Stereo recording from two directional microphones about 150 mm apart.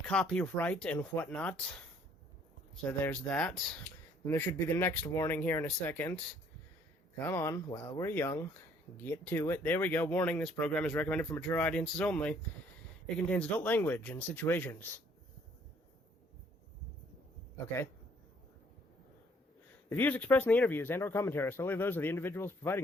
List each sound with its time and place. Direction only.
0.1 s speech: 5° left (ahead or behind)
3.0 s speech: 10° left (ahead or behind)
7.3 s speech: 15° left (ahead or behind)
19.9 s speech: 10° left (ahead or behind)